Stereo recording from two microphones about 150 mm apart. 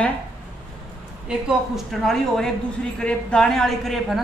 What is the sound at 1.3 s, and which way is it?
A woman's voice, centre (ahead or behind).